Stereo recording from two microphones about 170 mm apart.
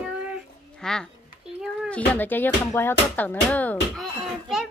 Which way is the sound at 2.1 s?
10° left (ahead or behind).